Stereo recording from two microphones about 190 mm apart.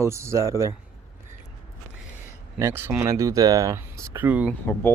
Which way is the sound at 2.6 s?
15° right (ahead or behind).